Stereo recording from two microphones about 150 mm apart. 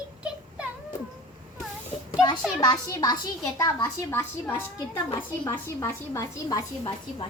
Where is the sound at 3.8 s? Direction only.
15° left (ahead or behind).